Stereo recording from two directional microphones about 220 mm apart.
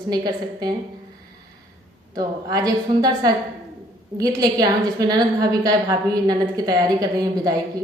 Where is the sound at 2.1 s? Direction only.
15° right (ahead or behind).